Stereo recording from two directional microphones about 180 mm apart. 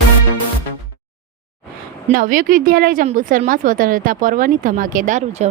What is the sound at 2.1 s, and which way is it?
A woman's voice, 50° right (ahead or behind).